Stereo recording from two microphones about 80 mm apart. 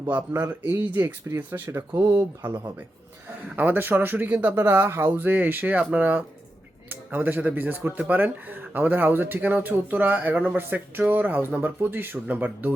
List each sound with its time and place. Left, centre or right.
0.1 s speech: right